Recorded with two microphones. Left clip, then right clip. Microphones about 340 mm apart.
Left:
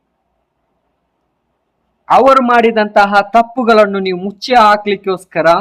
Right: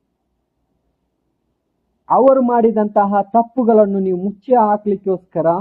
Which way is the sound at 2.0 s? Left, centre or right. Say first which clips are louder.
Left 4 dB; centre.